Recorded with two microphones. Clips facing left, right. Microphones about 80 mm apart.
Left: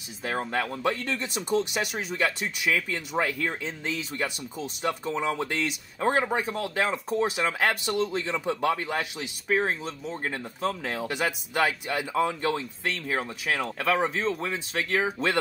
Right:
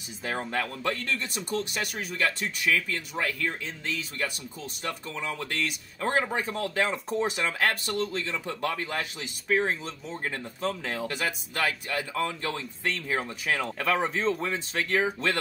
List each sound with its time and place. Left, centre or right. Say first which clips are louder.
0.2 s speech: left 2 dB; centre
6.2 s speech: left 2 dB; centre